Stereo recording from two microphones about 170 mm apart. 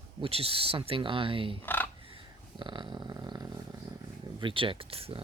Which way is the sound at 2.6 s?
25° right (ahead or behind).